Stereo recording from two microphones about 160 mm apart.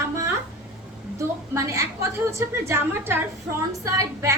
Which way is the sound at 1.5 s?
20° right (ahead or behind).